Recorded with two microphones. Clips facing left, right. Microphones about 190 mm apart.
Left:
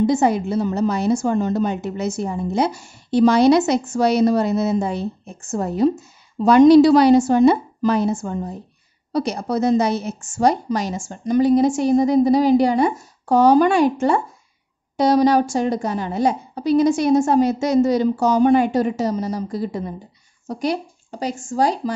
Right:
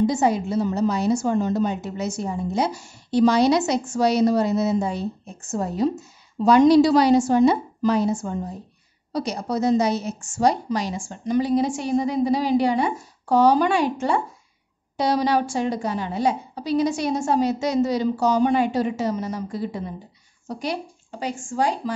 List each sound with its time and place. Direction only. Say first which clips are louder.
0.0 s a woman's voice: left 3 dB; 60° left (ahead or behind); by 21.9 s 40° left (ahead or behind)